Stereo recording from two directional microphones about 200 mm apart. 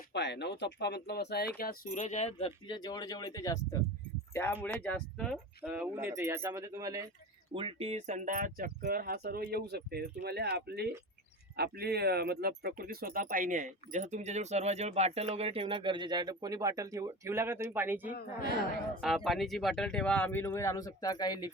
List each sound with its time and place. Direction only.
0.1 s speech: 60° left (ahead or behind); by 5.4 s 5° left (ahead or behind)
5.6 s speech: 5° right (ahead or behind)
7.5 s speech: 25° right (ahead or behind); by 21.5 s 20° left (ahead or behind)